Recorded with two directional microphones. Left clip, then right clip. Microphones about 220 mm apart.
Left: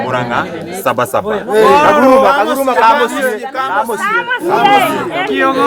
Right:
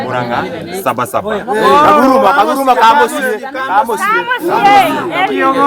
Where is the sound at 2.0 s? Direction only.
20° right (ahead or behind).